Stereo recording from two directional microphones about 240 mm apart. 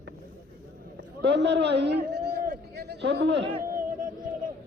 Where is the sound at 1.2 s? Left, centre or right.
Right.